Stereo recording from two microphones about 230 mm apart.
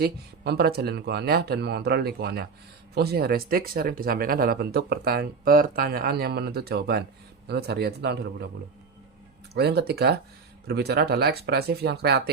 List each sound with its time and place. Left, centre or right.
0.0 s speech: right
9.6 s speech: right